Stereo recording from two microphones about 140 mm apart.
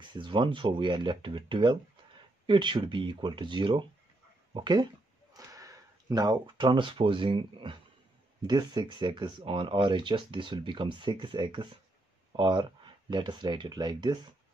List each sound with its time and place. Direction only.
0.0 s speech: 35° right (ahead or behind)